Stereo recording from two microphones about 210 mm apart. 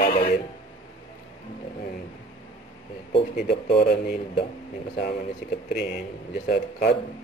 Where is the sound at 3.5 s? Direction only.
50° left (ahead or behind).